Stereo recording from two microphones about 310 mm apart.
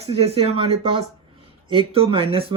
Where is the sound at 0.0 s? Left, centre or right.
Centre.